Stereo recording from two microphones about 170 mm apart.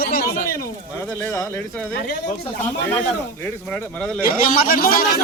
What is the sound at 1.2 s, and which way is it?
Speech, 15° left (ahead or behind).